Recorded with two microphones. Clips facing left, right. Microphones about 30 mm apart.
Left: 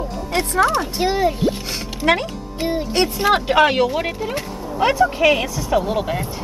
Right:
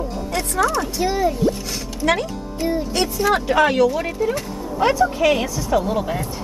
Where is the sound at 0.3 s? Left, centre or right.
Left.